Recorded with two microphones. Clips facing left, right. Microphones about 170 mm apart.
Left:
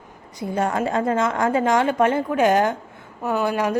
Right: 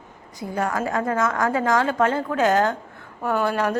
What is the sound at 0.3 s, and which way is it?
A woman's voice, 20° left (ahead or behind).